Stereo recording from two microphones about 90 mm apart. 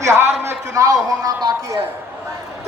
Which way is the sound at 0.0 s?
30° right (ahead or behind).